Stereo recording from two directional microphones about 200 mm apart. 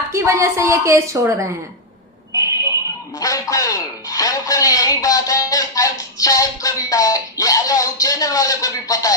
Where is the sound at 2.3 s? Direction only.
15° left (ahead or behind).